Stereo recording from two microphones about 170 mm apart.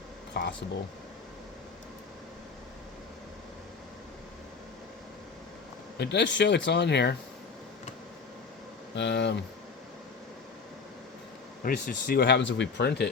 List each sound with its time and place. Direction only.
0.4 s speech: 70° left (ahead or behind)
6.0 s speech: 85° left
9.0 s speech: 90° left
11.6 s speech: 55° left (ahead or behind); by 13.1 s 75° left (ahead or behind)